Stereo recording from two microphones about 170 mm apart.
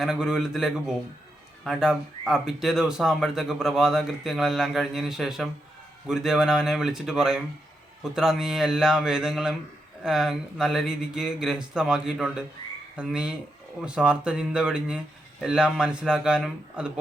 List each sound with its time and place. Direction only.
0.0 s speech: 5° right (ahead or behind)